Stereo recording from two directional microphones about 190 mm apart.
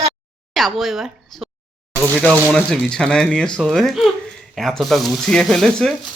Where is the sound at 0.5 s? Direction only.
Centre (ahead or behind).